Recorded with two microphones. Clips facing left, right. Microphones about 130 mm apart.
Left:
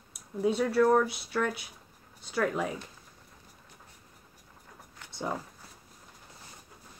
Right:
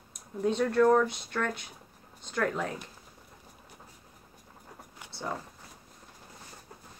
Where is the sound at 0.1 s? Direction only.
10° left (ahead or behind).